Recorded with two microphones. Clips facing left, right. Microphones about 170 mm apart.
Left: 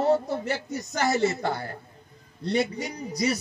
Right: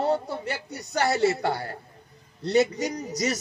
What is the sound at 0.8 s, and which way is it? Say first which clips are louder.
A man's voice: right 2 dB; 35° right (ahead or behind).